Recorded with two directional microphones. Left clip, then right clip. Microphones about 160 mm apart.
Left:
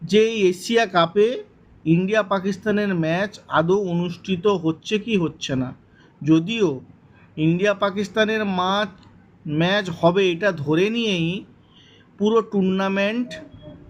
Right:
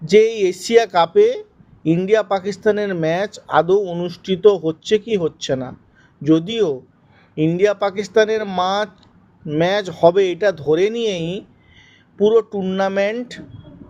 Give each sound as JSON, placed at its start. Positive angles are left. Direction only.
{"t": 0.0, "sound": "speech", "side_deg": -25}